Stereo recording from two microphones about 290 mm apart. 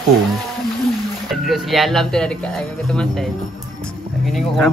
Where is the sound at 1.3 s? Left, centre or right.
Centre.